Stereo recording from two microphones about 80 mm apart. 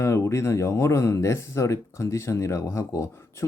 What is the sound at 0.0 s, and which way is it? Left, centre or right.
Speech, left.